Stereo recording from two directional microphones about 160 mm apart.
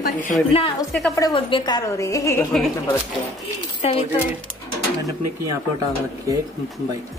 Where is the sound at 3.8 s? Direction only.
40° left (ahead or behind).